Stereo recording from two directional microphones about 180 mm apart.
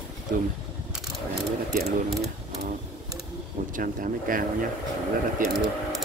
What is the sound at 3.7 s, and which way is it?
Speech, 50° right (ahead or behind).